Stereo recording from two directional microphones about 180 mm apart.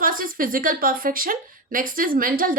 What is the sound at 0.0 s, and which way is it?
A woman's voice, 50° right (ahead or behind).